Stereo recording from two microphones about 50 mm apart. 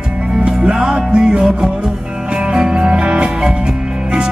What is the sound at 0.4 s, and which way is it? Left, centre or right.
Music, centre.